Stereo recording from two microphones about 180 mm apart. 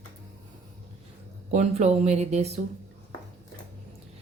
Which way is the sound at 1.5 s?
40° right (ahead or behind).